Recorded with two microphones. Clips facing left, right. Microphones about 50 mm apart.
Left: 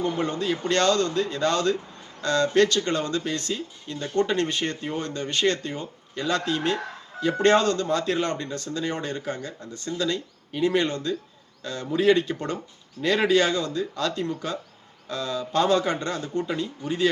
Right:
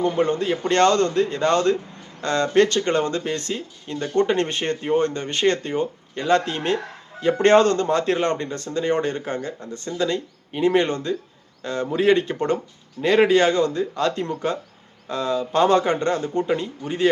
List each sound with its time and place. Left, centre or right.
0.0 s speech: right